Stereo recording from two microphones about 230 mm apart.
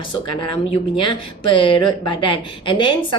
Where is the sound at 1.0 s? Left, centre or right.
Left.